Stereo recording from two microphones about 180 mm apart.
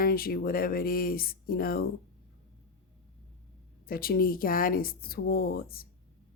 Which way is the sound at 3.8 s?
55° left (ahead or behind).